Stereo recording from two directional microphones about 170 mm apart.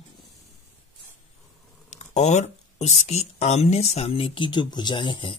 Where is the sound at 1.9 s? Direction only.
45° left (ahead or behind).